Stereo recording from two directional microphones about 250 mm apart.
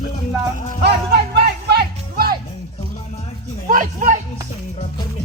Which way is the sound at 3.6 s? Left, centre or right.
Right.